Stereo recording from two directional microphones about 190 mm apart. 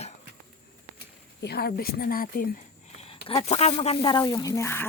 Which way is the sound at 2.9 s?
30° left (ahead or behind).